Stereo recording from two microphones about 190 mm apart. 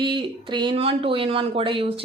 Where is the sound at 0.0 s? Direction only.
25° right (ahead or behind).